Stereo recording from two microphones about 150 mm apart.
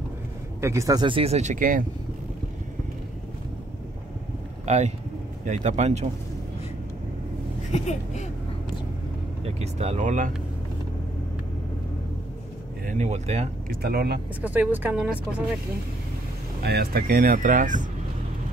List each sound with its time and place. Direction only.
0.6 s speech: 20° right (ahead or behind)
1.0 s speech: 40° right (ahead or behind); by 1.9 s 70° right (ahead or behind)
4.6 s speech: 45° right (ahead or behind)
7.7 s speech: 50° left (ahead or behind)
9.4 s speech: 45° right (ahead or behind)
12.8 s speech: 50° right (ahead or behind)
13.7 s speech: 90° right
14.4 s speech: 10° right (ahead or behind)
16.6 s speech: 90° right; by 17.8 s 60° right (ahead or behind)